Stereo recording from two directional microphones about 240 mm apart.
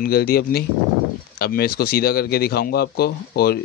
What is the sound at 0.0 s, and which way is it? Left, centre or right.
Speech, left.